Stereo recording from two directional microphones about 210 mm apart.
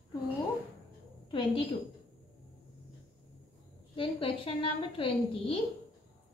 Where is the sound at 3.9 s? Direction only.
25° left (ahead or behind).